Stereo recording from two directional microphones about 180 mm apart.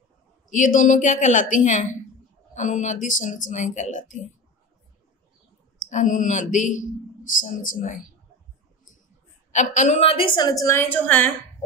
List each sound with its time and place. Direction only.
0.5 s a woman's voice: 45° left (ahead or behind)
5.9 s a woman's voice: 45° left (ahead or behind)
9.5 s a woman's voice: 40° left (ahead or behind); by 11.3 s 10° left (ahead or behind)